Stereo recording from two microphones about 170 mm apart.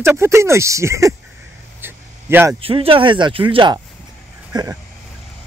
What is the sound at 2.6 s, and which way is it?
Speech, 35° right (ahead or behind).